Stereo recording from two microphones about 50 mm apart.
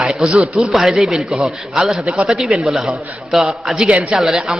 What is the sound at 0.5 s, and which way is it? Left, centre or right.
A man's voice, centre.